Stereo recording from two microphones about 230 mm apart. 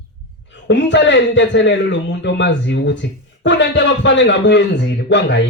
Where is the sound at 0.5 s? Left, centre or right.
Left.